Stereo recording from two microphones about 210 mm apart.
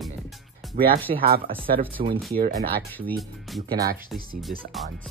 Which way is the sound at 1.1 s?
45° right (ahead or behind).